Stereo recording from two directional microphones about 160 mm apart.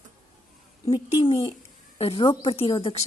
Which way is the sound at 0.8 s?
25° left (ahead or behind).